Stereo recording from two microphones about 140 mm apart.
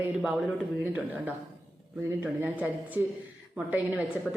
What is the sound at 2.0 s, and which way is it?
A woman's voice, 15° right (ahead or behind).